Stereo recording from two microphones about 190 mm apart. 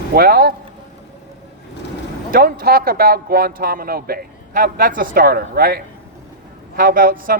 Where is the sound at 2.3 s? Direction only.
50° right (ahead or behind).